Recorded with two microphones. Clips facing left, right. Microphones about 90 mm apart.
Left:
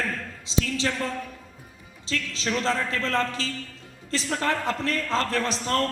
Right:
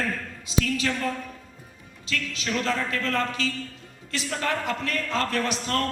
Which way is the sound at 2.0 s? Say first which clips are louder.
Left 1 dB; 30° left (ahead or behind).